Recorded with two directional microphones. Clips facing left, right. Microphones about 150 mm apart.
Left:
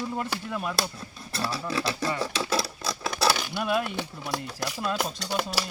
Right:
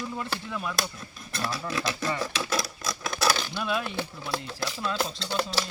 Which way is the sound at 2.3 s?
30° left (ahead or behind).